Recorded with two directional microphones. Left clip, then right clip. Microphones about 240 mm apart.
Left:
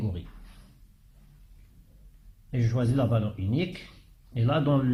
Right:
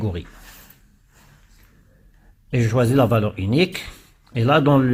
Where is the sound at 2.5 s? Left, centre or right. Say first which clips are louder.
Right 11 dB; right.